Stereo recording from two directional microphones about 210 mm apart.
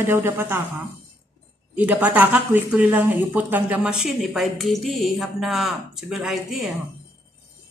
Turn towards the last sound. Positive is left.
turn(degrees=0)  # may be behind; listen again after turning